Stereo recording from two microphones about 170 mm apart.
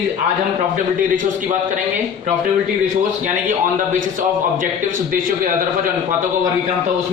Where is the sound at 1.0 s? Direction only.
50° right (ahead or behind).